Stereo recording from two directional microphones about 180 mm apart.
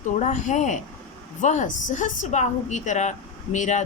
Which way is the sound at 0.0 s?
45° left (ahead or behind).